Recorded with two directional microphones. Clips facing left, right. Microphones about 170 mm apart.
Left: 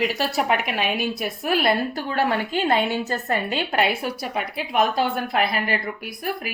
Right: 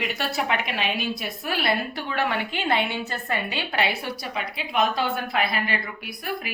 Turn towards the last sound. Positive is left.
turn(degrees=45)  # may be behind; listen again after turning